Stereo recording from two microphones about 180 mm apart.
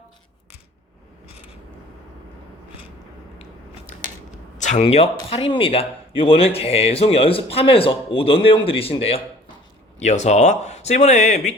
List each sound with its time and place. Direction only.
4.5 s speech: 40° left (ahead or behind)